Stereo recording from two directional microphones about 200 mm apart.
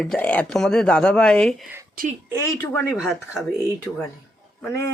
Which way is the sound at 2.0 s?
45° right (ahead or behind).